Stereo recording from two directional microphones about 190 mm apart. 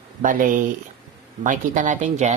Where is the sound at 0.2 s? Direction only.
45° right (ahead or behind).